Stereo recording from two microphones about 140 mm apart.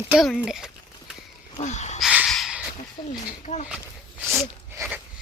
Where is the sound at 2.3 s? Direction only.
Centre (ahead or behind).